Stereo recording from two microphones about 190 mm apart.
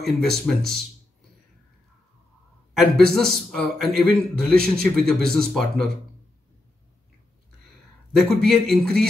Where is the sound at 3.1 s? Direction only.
Centre (ahead or behind).